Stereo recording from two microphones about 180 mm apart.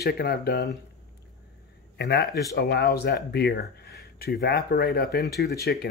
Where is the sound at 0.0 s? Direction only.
60° left (ahead or behind).